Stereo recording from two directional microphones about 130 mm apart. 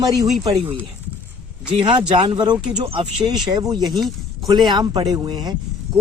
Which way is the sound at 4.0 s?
Centre (ahead or behind).